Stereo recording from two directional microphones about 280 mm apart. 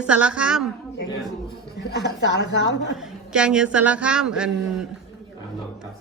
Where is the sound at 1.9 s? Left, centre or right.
Left.